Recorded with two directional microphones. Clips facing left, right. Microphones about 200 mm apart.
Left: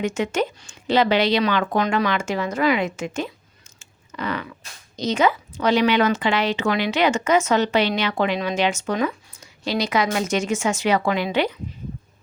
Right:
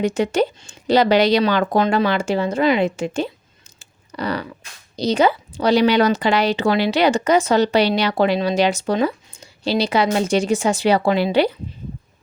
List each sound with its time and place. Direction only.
0.0 s speech: 35° right (ahead or behind)
3.8 s cat: 35° right (ahead or behind)
4.9 s speech: 35° right (ahead or behind)